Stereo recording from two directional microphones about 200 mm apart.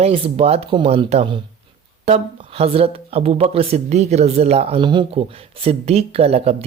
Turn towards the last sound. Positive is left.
turn(degrees=-30)  # may be behind; listen again after turning